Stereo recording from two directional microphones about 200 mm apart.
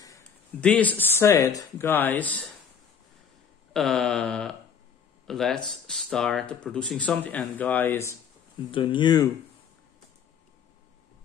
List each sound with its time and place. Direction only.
0.6 s speech: 5° left (ahead or behind)
3.7 s speech: centre (ahead or behind)
8.7 s speech: 25° left (ahead or behind)